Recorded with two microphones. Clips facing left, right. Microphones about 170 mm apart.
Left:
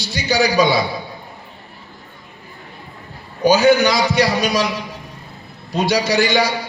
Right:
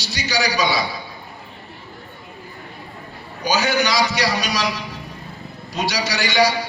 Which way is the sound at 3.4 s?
55° left (ahead or behind).